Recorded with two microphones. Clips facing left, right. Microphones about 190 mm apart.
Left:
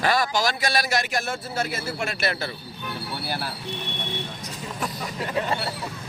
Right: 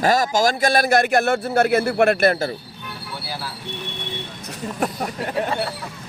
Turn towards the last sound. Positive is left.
turn(degrees=-55)  # may be behind; listen again after turning